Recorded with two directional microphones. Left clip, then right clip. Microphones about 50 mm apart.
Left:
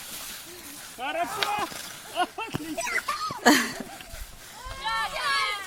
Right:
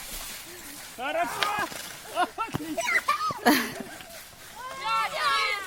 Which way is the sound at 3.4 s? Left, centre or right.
Left.